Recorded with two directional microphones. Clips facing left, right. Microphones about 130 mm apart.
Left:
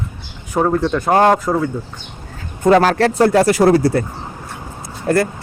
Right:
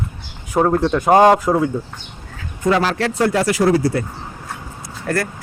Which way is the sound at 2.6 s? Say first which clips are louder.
Left 5 dB; 45° left (ahead or behind).